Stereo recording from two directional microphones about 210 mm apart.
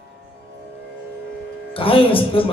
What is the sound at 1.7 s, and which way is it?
Speech, 25° left (ahead or behind).